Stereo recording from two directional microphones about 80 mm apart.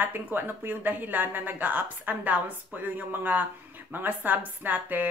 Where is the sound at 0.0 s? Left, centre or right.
Right.